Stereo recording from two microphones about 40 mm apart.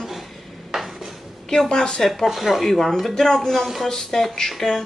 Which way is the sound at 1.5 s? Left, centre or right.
Centre.